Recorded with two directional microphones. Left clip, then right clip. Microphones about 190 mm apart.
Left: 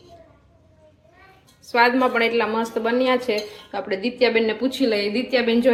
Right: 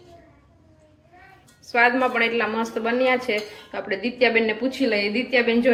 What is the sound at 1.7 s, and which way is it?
Speech, 25° left (ahead or behind).